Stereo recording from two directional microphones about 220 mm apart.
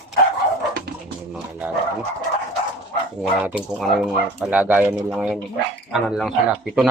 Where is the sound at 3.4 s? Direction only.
5° right (ahead or behind).